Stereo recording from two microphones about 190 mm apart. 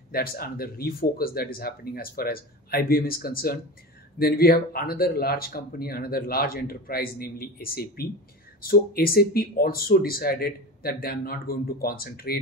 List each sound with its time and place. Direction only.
0.1 s speech: 50° left (ahead or behind)